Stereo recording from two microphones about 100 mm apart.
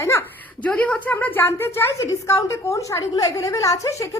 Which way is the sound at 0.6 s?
15° left (ahead or behind).